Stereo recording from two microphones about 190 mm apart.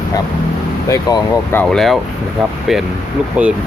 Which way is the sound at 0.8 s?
15° left (ahead or behind).